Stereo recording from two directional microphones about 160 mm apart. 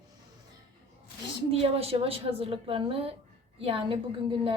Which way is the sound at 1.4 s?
40° right (ahead or behind).